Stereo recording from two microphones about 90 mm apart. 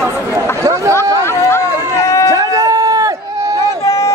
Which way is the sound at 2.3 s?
45° right (ahead or behind).